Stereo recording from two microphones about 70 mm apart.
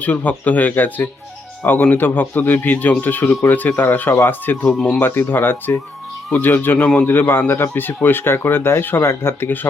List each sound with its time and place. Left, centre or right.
0.0 s speech: left
4.7 s speech: centre
4.9 s speech: left